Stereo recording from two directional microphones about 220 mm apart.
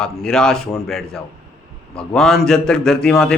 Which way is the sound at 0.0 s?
5° left (ahead or behind).